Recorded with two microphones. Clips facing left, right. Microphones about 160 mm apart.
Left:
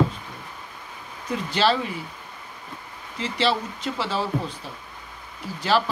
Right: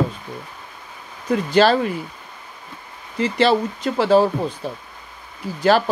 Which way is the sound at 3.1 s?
50° right (ahead or behind).